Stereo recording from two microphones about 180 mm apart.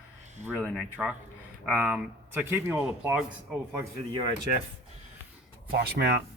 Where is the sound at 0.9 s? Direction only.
10° right (ahead or behind).